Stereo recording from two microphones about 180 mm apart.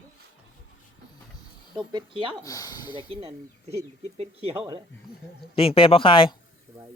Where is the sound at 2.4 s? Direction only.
20° left (ahead or behind).